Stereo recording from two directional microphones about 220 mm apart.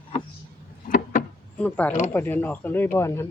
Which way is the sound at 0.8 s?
40° left (ahead or behind).